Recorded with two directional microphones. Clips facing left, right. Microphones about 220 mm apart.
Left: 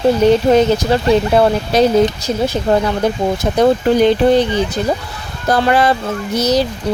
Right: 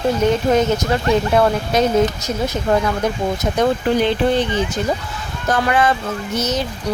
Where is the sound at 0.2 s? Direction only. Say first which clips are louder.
Left 4 dB; 30° left (ahead or behind).